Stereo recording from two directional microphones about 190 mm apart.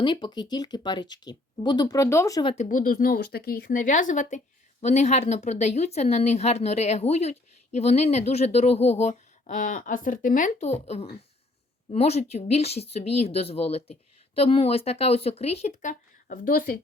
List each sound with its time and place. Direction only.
0.0 s speech: 25° left (ahead or behind)
2.6 s a woman's voice: 45° left (ahead or behind)